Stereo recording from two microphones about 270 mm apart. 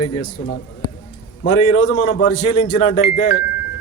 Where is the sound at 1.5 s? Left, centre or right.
Left.